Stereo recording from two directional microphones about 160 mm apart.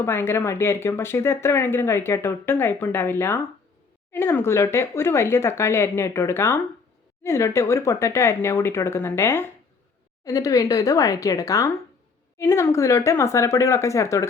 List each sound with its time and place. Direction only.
0.0 s a woman's voice: 15° left (ahead or behind)